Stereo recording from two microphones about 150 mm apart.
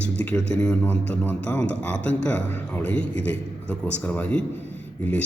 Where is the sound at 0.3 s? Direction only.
5° left (ahead or behind).